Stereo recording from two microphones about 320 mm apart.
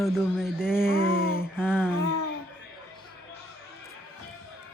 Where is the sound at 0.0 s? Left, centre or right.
Centre.